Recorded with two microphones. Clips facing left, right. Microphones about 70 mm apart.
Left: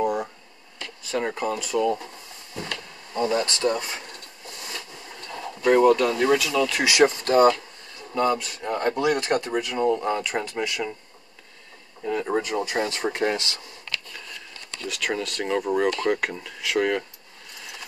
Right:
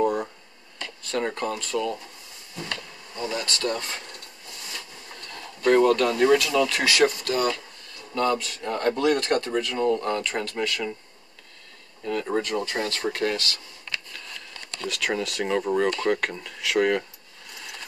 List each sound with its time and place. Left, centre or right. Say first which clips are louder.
0.0 s a sound: right 1 dB; centre
1.0 s speech: left 1 dB; centre
3.2 s speech: left 6 dB; left; by 4.0 s centre
5.6 s speech: left 1 dB; centre
6.9 s speech: left 3 dB; left
8.1 s speech: left 1 dB; centre
12.0 s speech: left 1 dB; centre
14.9 s speech: right 1 dB; centre
17.6 s a sound: even; centre